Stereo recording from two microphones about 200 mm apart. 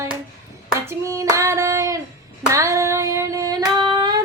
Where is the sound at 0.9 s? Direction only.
15° right (ahead or behind).